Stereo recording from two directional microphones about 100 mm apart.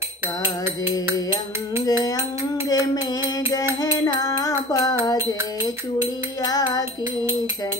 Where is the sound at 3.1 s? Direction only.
40° left (ahead or behind).